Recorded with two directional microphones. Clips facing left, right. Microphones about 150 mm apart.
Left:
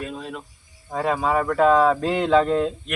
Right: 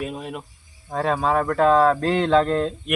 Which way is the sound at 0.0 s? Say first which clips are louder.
Right 2 dB; 15° right (ahead or behind).